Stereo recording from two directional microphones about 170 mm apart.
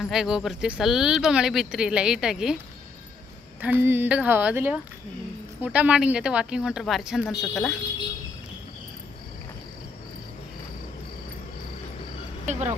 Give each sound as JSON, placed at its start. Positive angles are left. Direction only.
{"t": 0.0, "sound": "speech", "side_deg": 0}
{"t": 3.6, "sound": "speech", "side_deg": -10}
{"t": 12.5, "sound": "vehicle", "side_deg": -45}